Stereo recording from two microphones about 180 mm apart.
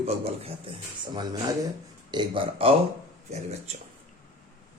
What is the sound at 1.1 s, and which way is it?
Speech, 20° right (ahead or behind).